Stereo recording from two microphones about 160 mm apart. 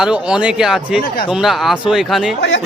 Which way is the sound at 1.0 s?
65° left (ahead or behind).